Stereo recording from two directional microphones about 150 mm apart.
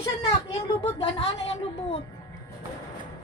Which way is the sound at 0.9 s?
45° left (ahead or behind).